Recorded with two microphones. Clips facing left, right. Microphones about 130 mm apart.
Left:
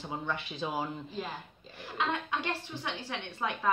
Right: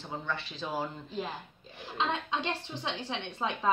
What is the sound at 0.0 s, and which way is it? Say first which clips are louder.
Speech: left 1 dB; 15° left (ahead or behind).